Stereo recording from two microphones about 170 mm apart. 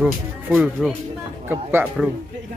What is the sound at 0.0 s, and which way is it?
Speech, 10° right (ahead or behind).